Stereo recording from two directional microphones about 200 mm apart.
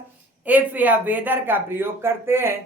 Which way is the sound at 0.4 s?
10° right (ahead or behind).